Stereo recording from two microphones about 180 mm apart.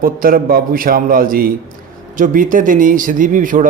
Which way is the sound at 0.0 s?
50° right (ahead or behind).